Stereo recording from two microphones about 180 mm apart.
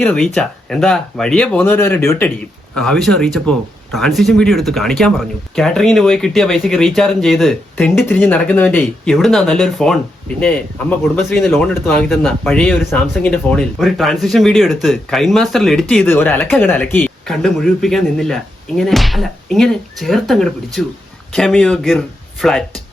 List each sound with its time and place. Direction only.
0.0 s speech: 5° left (ahead or behind)
9.1 s speech: centre (ahead or behind)